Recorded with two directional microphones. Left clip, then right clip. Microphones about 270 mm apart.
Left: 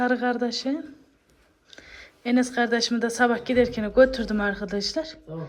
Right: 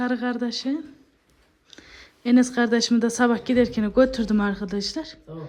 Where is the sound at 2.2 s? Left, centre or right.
Right.